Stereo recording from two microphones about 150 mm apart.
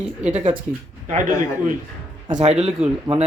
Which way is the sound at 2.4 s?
45° right (ahead or behind).